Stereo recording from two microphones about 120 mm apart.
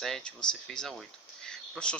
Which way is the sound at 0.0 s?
5° left (ahead or behind).